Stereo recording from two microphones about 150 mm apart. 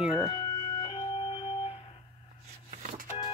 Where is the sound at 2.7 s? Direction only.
55° right (ahead or behind).